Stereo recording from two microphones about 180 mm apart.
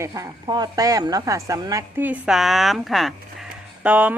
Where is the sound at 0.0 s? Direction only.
20° right (ahead or behind).